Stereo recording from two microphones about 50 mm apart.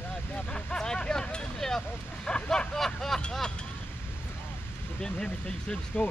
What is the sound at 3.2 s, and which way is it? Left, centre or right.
Vehicle, centre.